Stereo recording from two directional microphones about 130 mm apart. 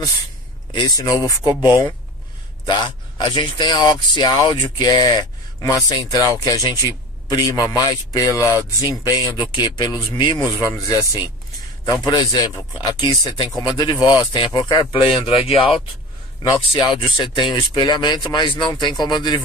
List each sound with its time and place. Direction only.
0.7 s speech: 30° left (ahead or behind)